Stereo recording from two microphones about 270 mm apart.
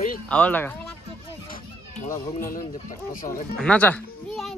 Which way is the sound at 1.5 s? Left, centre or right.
Left.